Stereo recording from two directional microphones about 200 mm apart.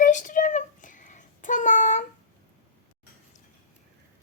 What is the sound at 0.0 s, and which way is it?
Child singing, 40° left (ahead or behind).